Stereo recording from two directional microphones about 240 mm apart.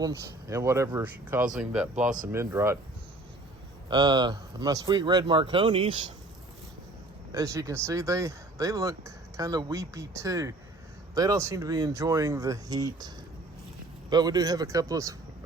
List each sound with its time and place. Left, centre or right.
0.0 s speech: centre
2.0 s speech: right
2.3 s speech: centre
3.8 s speech: centre
7.3 s speech: centre
14.1 s speech: centre